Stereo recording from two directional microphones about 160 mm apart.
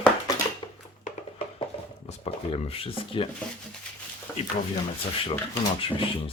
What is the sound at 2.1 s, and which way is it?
Speech, 40° left (ahead or behind).